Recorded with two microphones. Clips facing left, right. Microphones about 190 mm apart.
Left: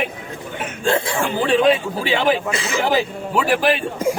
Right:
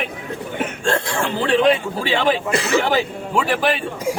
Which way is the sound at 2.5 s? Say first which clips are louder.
Right 4 dB; 60° right (ahead or behind).